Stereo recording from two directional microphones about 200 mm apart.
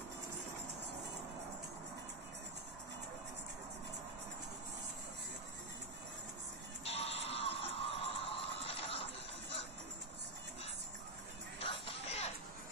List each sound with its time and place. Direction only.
6.8 s music: 30° left (ahead or behind)
11.6 s music: 25° left (ahead or behind)